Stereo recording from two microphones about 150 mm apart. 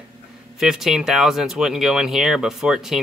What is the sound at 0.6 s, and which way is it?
Speech, 5° right (ahead or behind).